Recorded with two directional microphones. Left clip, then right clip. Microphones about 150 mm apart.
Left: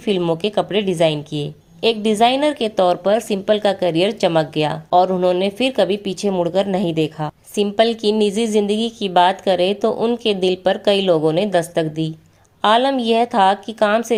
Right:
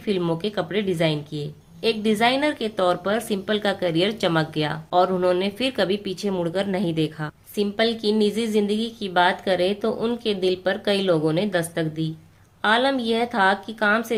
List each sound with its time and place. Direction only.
0.4 s speech: 35° left (ahead or behind)